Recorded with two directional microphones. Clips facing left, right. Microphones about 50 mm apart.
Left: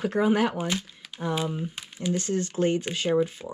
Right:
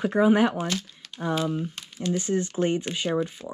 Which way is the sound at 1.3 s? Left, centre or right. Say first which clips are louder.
Right 4 dB; centre.